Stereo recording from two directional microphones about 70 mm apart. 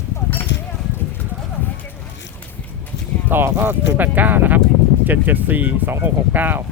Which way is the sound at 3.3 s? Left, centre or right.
Right.